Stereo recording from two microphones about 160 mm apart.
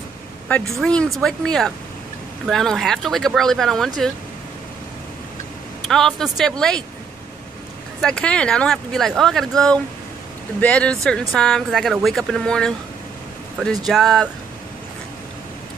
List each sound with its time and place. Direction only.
0.7 s speech: 5° left (ahead or behind)
5.9 s speech: 5° left (ahead or behind)
8.0 s speech: 5° left (ahead or behind)
13.8 s speech: centre (ahead or behind)